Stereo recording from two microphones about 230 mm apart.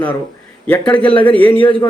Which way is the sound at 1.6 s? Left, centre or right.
Left.